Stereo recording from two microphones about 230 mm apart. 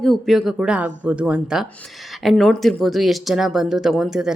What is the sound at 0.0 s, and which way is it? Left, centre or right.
Speech, centre.